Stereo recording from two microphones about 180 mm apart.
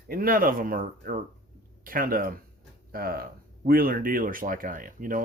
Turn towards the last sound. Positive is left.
turn(degrees=-50)  # may be behind; listen again after turning